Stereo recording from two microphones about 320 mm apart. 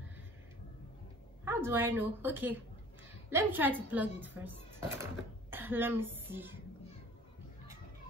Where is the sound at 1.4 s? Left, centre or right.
Centre.